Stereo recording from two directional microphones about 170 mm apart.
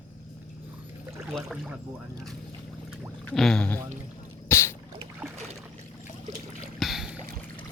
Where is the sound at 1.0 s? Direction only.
10° right (ahead or behind).